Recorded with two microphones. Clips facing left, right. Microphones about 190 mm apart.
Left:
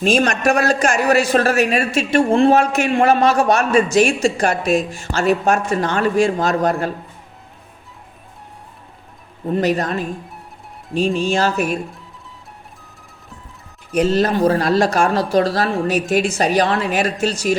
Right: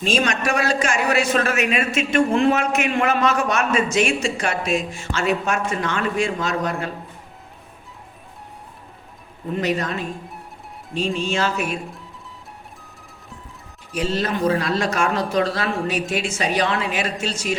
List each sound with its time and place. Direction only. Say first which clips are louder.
0.0 s a man's voice: left 5 dB; 45° left (ahead or behind)
9.5 s a man's voice: left 5 dB; 40° left (ahead or behind)
11.3 s a man's voice: left 5 dB; 40° left (ahead or behind)
14.1 s a man's voice: left 4 dB; 40° left (ahead or behind)